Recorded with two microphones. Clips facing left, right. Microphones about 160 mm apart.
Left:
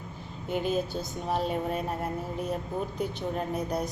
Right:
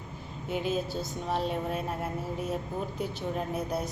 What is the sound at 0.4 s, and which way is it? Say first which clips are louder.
A woman's voice: left 2 dB; centre (ahead or behind).